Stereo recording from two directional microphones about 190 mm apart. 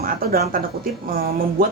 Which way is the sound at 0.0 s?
50° right (ahead or behind).